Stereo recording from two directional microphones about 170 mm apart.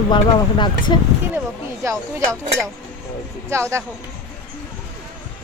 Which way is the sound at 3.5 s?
15° right (ahead or behind).